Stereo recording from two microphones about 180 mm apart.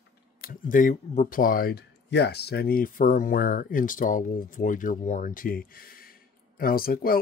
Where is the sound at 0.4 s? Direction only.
50° left (ahead or behind).